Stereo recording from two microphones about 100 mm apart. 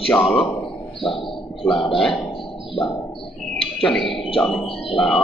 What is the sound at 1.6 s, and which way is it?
Speech, centre (ahead or behind).